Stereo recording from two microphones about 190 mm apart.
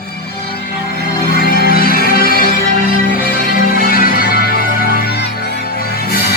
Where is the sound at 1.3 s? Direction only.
50° left (ahead or behind).